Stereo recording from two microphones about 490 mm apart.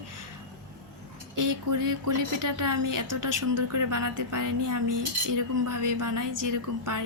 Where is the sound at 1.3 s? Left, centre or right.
Right.